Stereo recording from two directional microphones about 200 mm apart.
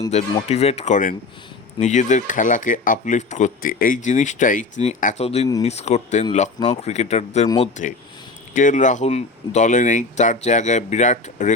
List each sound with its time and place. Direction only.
0.1 s speech: 35° left (ahead or behind)
7.4 s speech: 20° left (ahead or behind)
8.5 s speech: 40° left (ahead or behind)